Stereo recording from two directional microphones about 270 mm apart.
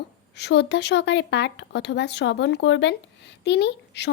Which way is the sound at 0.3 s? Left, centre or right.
Left.